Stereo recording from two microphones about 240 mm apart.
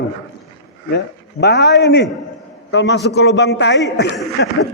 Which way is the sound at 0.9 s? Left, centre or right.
Left.